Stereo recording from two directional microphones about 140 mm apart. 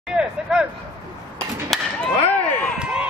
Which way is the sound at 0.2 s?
5° right (ahead or behind).